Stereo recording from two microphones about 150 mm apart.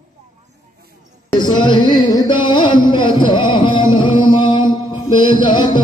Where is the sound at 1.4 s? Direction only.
30° left (ahead or behind).